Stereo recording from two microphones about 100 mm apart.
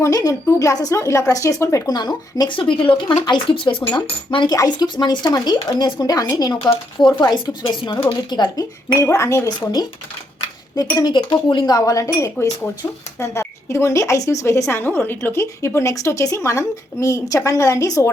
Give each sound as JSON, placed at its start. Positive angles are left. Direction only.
{"t": 0.0, "sound": "speech", "side_deg": 35}
{"t": 1.9, "sound": "speech", "side_deg": 45}
{"t": 4.4, "sound": "speech", "side_deg": 40}
{"t": 9.0, "sound": "speech", "side_deg": 30}
{"t": 11.0, "sound": "speech", "side_deg": 50}